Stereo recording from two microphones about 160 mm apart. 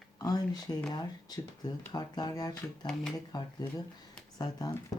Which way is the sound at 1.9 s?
25° left (ahead or behind).